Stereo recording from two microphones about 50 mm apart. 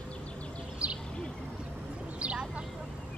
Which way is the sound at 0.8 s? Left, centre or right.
Right.